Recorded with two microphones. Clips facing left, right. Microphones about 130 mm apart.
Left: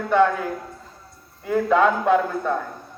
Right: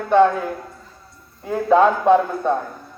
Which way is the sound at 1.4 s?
25° right (ahead or behind).